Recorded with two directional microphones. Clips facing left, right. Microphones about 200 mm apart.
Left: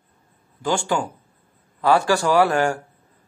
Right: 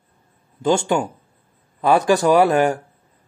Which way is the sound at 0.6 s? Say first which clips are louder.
Right 4 dB; 25° right (ahead or behind).